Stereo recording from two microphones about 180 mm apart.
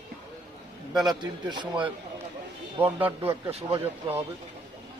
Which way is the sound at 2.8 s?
10° right (ahead or behind).